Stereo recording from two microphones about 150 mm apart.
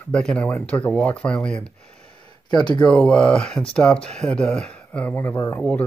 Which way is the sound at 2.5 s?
30° left (ahead or behind).